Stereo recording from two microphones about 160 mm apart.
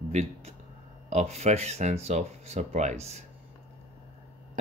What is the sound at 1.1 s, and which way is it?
Speech, 45° right (ahead or behind).